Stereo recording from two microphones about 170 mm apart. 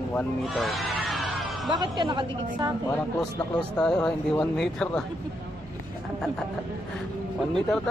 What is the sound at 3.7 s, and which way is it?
Speech, 5° left (ahead or behind).